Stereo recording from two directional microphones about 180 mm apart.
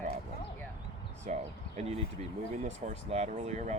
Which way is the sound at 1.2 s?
40° right (ahead or behind).